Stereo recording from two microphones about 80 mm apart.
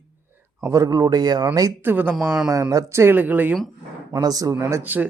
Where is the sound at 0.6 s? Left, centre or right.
Right.